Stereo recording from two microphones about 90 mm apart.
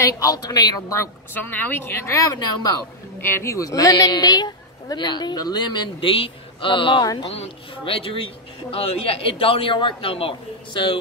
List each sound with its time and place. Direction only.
0.0 s a woman's voice: 40° left (ahead or behind)
1.3 s a woman's voice: 20° left (ahead or behind); by 7.1 s 70° left (ahead or behind)
7.2 s a man's voice: 85° left; by 11.0 s 70° left (ahead or behind)